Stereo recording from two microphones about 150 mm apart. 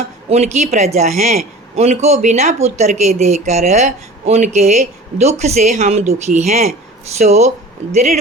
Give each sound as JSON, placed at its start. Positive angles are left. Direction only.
{"t": 0.3, "sound": "speech", "side_deg": -50}